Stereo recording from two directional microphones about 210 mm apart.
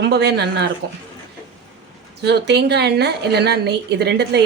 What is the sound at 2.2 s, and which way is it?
A woman's voice, 50° right (ahead or behind).